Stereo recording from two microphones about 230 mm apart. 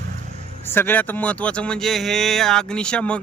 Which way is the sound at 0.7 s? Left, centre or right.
Centre.